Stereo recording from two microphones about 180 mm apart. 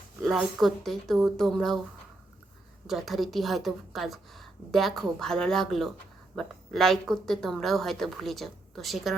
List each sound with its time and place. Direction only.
0.2 s a woman's voice: centre (ahead or behind)
2.8 s a woman's voice: centre (ahead or behind)